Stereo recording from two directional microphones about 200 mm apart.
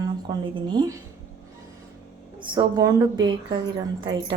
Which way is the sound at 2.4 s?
20° right (ahead or behind).